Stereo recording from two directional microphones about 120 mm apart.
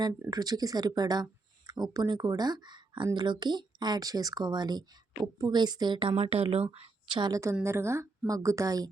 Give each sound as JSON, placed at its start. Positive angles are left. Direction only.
{"t": 0.3, "sound": "speech", "side_deg": -35}
{"t": 7.1, "sound": "a woman's voice", "side_deg": -35}